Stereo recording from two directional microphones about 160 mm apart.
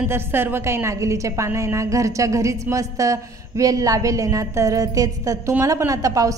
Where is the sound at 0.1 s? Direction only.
15° right (ahead or behind).